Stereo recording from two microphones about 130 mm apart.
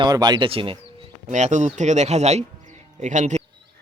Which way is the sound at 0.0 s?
35° right (ahead or behind).